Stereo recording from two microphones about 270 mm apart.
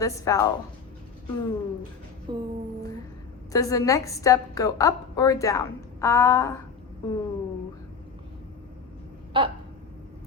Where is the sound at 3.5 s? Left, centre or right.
Centre.